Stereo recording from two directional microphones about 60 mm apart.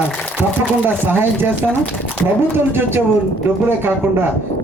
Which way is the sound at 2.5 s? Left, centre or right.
Right.